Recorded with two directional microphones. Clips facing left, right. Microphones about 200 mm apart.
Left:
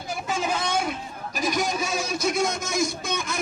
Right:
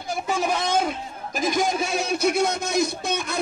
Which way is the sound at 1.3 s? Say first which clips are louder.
Right 3 dB; 50° right (ahead or behind).